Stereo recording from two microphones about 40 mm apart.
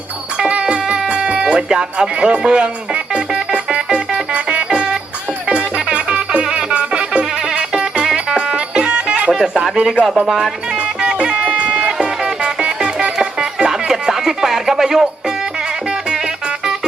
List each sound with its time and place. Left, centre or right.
0.4 s music: right
1.7 s speech: right
2.4 s music: right
9.7 s speech: right
10.2 s music: centre
11.0 s music: right
13.9 s a sound: centre